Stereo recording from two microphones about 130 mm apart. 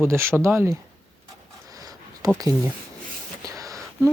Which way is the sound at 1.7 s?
30° right (ahead or behind).